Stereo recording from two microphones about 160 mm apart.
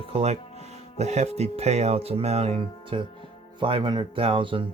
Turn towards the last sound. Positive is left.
turn(degrees=-35)  # may be behind; listen again after turning